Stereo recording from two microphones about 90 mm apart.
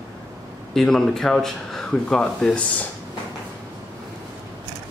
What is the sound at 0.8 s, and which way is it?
Speech, 5° left (ahead or behind).